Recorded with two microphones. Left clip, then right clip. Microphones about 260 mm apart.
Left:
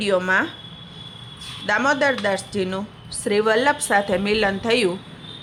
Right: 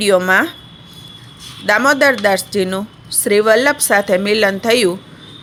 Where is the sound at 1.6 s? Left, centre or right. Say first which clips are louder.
Right 7 dB; centre.